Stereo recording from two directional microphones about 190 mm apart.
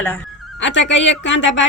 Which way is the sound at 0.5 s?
70° left (ahead or behind).